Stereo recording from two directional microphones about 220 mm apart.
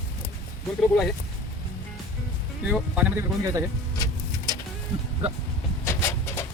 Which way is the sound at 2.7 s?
5° right (ahead or behind).